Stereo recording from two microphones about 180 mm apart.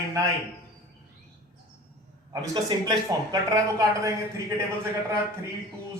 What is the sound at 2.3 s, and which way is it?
Speech, 20° right (ahead or behind).